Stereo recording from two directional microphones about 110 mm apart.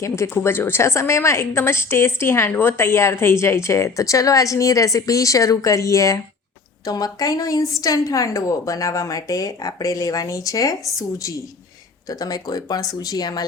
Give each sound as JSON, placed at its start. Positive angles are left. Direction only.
{"t": 0.0, "sound": "a woman's voice", "side_deg": 25}
{"t": 12.0, "sound": "a woman's voice", "side_deg": 35}